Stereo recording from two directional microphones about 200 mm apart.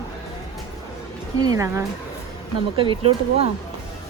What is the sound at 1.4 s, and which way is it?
Speech, 15° right (ahead or behind).